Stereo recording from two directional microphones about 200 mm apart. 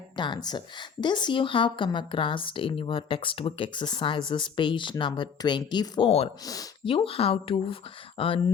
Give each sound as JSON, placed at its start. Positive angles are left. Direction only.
{"t": 0.2, "sound": "a woman's voice", "side_deg": 20}
{"t": 6.4, "sound": "a woman's voice", "side_deg": 20}